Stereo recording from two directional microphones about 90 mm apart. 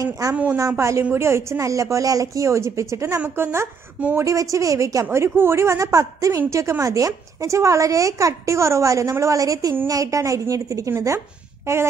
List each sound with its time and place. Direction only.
0.0 s a woman's voice: 30° right (ahead or behind)
4.2 s a woman's voice: 40° right (ahead or behind)
11.6 s a sound: 30° right (ahead or behind)